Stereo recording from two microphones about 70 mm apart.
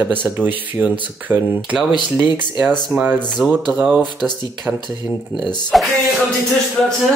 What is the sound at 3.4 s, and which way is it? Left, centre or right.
Speech, centre.